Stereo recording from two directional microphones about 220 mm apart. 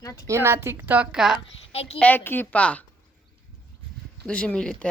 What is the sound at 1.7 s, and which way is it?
Speech, 25° left (ahead or behind).